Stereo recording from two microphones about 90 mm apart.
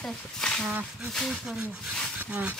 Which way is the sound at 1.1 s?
5° left (ahead or behind).